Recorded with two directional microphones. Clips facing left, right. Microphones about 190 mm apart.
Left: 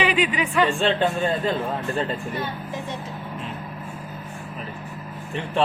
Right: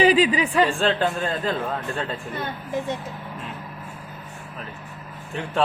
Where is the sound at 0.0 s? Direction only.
35° right (ahead or behind).